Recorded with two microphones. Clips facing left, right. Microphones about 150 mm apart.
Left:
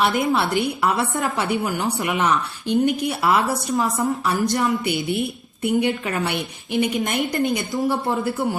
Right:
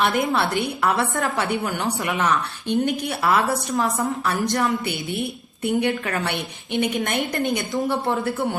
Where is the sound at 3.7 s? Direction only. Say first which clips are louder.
Left 3 dB; 15° left (ahead or behind).